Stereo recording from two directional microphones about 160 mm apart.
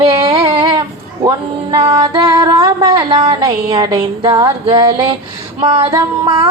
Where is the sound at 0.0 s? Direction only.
35° right (ahead or behind).